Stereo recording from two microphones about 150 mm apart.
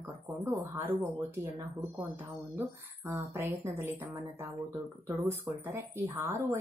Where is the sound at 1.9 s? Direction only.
15° right (ahead or behind).